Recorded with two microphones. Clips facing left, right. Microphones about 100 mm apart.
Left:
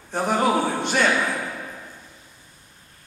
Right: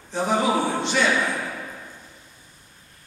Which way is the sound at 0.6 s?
10° left (ahead or behind).